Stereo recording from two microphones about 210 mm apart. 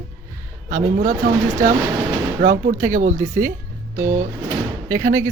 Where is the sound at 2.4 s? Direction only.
40° right (ahead or behind).